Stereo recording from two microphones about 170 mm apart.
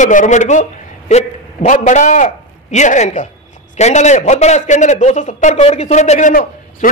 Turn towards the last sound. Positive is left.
turn(degrees=55)  # may be behind; listen again after turning